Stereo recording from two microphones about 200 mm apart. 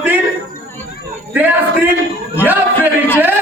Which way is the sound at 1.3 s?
10° right (ahead or behind).